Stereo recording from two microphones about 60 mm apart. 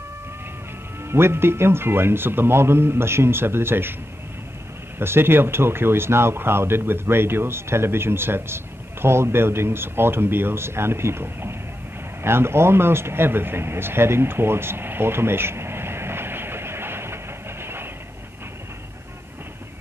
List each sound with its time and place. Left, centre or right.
1.1 s speech: right
4.9 s speech: right
12.2 s a sound: right